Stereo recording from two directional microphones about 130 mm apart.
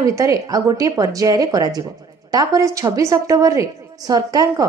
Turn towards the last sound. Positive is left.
turn(degrees=-30)  # may be behind; listen again after turning